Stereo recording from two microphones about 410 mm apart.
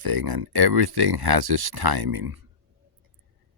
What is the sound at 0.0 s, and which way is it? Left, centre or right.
Speech, right.